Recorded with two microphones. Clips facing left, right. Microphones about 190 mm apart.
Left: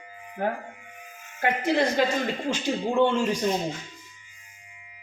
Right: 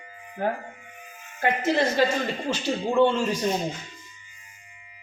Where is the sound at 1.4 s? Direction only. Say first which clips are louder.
Even; 15° left (ahead or behind).